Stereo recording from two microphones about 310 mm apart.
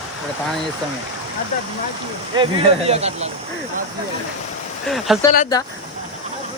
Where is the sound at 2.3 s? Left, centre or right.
Centre.